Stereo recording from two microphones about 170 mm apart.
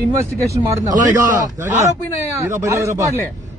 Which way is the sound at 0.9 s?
50° right (ahead or behind).